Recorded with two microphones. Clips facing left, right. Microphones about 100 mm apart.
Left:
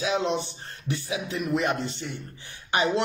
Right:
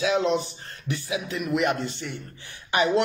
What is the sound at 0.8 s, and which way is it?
Speech, 35° left (ahead or behind).